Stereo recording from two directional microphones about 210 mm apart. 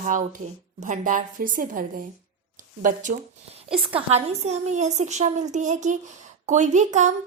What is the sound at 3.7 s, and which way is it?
A woman's voice, 25° right (ahead or behind).